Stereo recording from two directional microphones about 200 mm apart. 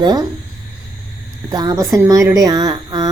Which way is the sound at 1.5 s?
20° right (ahead or behind).